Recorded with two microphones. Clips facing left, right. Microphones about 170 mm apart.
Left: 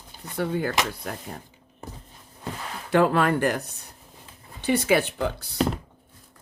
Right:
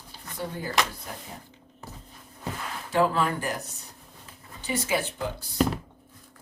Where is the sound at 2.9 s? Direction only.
65° left (ahead or behind).